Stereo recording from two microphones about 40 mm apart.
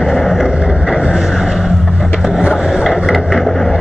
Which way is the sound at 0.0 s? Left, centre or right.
Centre.